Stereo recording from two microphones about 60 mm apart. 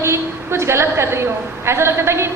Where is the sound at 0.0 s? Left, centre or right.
Right.